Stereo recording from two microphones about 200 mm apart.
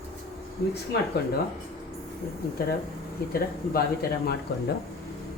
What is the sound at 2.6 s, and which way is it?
Speech, 50° left (ahead or behind).